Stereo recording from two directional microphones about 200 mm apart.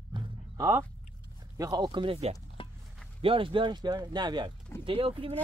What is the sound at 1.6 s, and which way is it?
Speech, 20° right (ahead or behind).